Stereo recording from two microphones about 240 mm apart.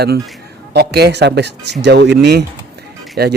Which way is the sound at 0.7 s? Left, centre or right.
Right.